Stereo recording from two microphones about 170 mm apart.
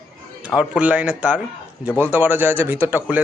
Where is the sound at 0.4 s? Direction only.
5° right (ahead or behind).